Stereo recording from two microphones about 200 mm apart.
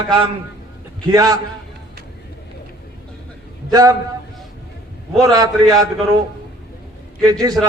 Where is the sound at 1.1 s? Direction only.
20° right (ahead or behind).